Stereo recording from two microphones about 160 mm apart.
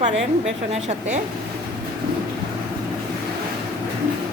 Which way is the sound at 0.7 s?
45° right (ahead or behind).